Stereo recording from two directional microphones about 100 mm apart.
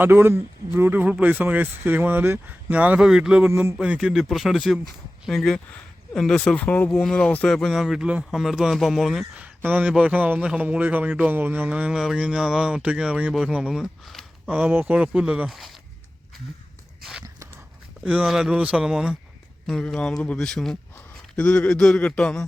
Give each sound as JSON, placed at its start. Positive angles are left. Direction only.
{"t": 0.0, "sound": "a man's voice", "side_deg": -20}
{"t": 9.6, "sound": "speech", "side_deg": -20}
{"t": 14.5, "sound": "speech", "side_deg": -15}
{"t": 17.0, "sound": "a sound", "side_deg": -5}
{"t": 18.0, "sound": "speech", "side_deg": -10}
{"t": 19.6, "sound": "a man's voice", "side_deg": 5}